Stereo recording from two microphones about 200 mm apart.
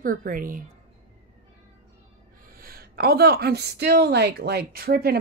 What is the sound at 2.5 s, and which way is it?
Speech, 45° right (ahead or behind).